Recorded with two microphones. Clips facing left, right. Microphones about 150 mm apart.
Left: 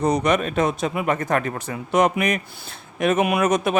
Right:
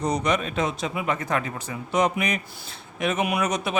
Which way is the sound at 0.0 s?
55° left (ahead or behind).